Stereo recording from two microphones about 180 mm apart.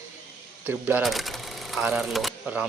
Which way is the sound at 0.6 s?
10° right (ahead or behind).